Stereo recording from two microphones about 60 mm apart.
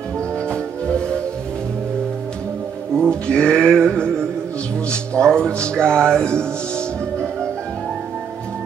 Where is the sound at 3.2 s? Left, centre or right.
Centre.